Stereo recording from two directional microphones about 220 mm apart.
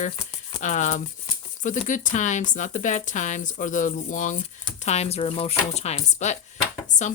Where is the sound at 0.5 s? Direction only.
35° left (ahead or behind).